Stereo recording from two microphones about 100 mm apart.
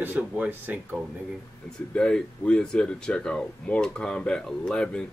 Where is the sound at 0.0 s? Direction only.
20° right (ahead or behind).